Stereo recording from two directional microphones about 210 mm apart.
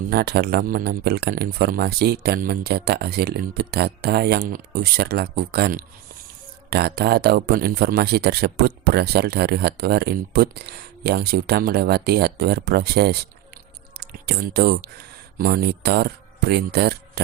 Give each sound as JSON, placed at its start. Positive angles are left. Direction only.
{"t": 0.1, "sound": "speech", "side_deg": -50}